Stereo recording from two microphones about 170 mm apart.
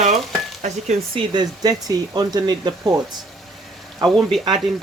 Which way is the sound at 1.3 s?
25° right (ahead or behind).